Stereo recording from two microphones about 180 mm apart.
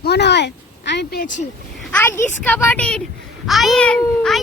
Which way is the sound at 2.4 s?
10° left (ahead or behind).